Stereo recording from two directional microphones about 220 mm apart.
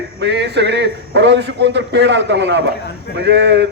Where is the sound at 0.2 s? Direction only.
50° right (ahead or behind).